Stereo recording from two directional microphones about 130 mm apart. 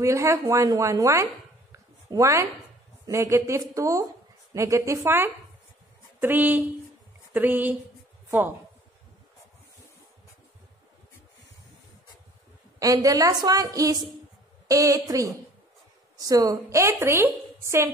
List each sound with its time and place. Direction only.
0.0 s a woman's voice: 20° right (ahead or behind)
12.7 s a woman's voice: 25° right (ahead or behind)